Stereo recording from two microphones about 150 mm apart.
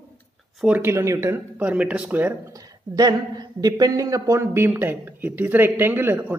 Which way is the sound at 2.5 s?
25° right (ahead or behind).